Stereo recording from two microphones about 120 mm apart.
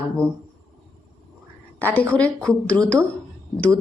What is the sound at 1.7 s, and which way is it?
A woman's voice, 15° left (ahead or behind).